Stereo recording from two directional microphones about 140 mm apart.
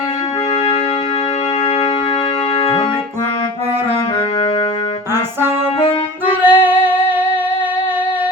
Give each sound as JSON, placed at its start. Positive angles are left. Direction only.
{"t": 2.6, "sound": "keyboard", "side_deg": 45}
{"t": 6.4, "sound": "music", "side_deg": -15}